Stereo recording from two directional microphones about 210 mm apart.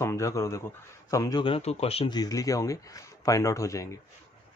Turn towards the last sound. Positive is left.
turn(degrees=15)  # may be behind; listen again after turning